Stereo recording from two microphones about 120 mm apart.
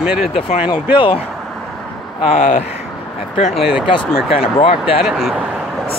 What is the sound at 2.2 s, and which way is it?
Speech, 70° left (ahead or behind).